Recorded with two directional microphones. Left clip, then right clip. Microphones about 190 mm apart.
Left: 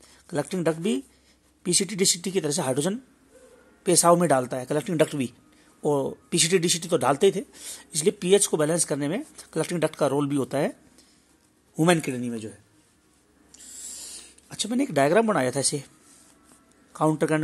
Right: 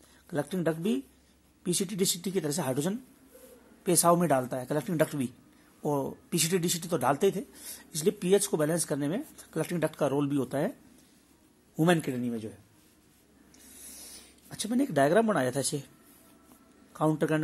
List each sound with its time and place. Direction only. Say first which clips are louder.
0.3 s speech: left 5 dB; 40° left (ahead or behind)
11.7 s speech: left 4 dB; 40° left (ahead or behind)
14.5 s speech: left 4 dB; 30° left (ahead or behind)
16.9 s a man's voice: left 5 dB; 35° left (ahead or behind)